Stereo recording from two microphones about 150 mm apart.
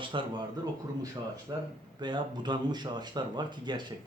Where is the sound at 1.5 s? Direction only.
25° right (ahead or behind).